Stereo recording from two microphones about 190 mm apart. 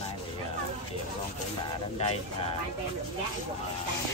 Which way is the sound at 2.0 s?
30° left (ahead or behind).